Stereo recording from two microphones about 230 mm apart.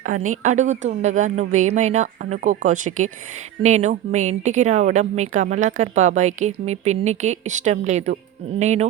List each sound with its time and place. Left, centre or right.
0.0 s speech: right